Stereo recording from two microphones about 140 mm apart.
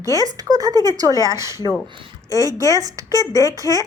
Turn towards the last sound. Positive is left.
turn(degrees=-25)  # may be behind; listen again after turning